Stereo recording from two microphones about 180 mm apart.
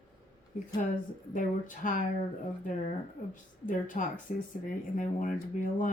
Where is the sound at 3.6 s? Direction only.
45° left (ahead or behind).